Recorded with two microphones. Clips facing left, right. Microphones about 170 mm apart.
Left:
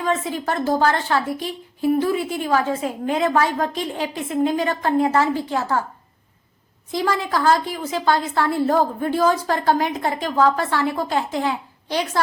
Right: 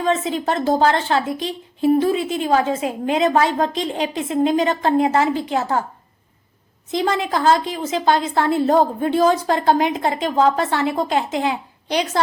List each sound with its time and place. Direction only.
0.0 s speech: 20° right (ahead or behind)
6.9 s speech: 20° right (ahead or behind)